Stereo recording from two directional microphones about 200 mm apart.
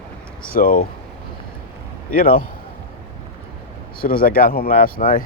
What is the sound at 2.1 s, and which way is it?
Speech, 45° left (ahead or behind).